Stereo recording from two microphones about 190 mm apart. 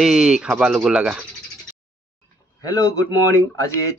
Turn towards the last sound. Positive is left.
turn(degrees=15)  # may be behind; listen again after turning